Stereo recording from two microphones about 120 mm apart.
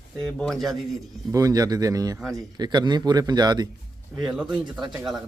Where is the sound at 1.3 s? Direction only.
30° right (ahead or behind).